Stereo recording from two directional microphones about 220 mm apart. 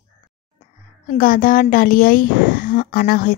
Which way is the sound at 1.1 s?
40° left (ahead or behind).